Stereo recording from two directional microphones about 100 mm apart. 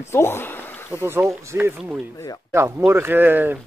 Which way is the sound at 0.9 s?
25° right (ahead or behind).